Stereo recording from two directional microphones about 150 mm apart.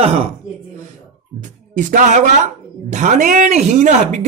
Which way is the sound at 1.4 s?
55° right (ahead or behind).